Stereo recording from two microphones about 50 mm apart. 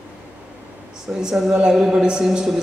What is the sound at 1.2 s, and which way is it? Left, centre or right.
A man's voice, centre.